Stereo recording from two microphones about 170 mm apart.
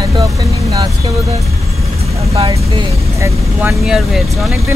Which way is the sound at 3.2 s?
15° right (ahead or behind).